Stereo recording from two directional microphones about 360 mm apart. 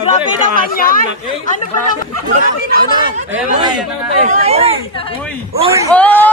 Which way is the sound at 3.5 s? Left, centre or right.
Centre.